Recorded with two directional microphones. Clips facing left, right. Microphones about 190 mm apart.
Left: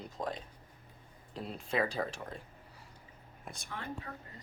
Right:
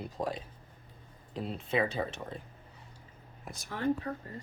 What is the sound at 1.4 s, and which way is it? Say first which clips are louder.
Speech: right 3 dB; centre (ahead or behind).